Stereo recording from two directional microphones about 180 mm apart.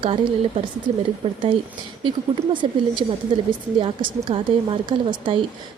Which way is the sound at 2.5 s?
25° right (ahead or behind).